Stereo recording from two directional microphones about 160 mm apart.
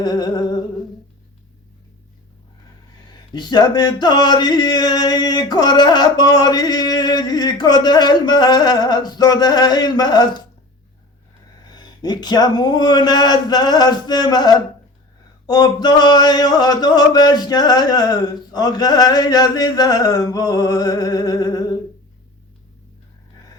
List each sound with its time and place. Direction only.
0.0 s a sound: 25° left (ahead or behind)
3.1 s speech: 25° left (ahead or behind)
11.7 s speech: 25° left (ahead or behind)